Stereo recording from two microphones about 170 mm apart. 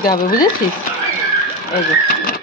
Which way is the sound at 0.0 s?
60° left (ahead or behind).